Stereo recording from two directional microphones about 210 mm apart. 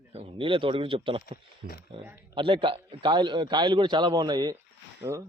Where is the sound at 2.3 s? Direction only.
25° right (ahead or behind).